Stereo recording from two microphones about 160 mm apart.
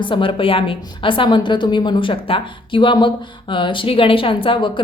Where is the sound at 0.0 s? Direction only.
30° left (ahead or behind).